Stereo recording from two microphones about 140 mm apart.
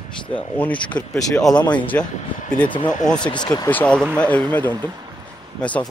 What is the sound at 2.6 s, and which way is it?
Speech, 35° left (ahead or behind).